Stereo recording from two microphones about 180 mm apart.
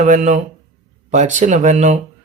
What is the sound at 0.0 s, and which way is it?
Speech, 40° right (ahead or behind).